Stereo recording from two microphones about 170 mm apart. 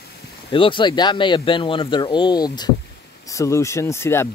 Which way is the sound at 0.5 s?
30° left (ahead or behind).